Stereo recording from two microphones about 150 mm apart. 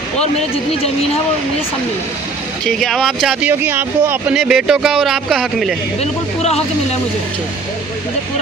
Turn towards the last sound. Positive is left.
turn(degrees=45)  # may be behind; listen again after turning